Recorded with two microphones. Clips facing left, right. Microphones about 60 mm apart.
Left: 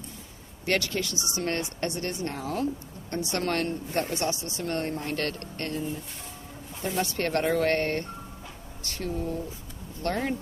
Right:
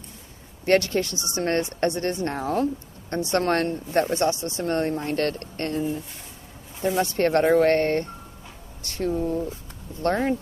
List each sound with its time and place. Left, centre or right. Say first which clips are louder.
0.7 s speech: right 7 dB; right
7.0 s speech: right 6 dB; right